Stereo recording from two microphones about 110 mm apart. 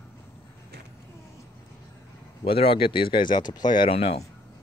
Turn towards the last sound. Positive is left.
turn(degrees=65)  # may be behind; listen again after turning